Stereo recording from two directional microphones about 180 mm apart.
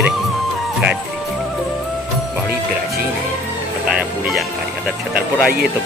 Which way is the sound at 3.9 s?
5° right (ahead or behind).